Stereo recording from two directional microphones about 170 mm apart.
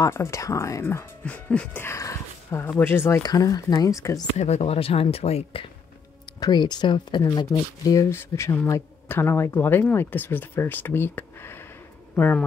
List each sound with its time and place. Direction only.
0.0 s speech: 15° left (ahead or behind)
4.4 s speech: 40° left (ahead or behind); by 12.4 s 10° left (ahead or behind)